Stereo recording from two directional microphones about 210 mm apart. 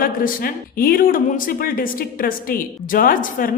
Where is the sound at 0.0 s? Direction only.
40° left (ahead or behind).